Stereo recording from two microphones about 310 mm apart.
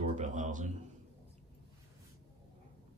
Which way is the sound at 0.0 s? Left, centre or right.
Right.